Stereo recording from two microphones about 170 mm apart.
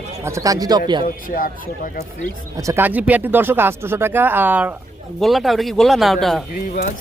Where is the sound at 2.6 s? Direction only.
15° right (ahead or behind).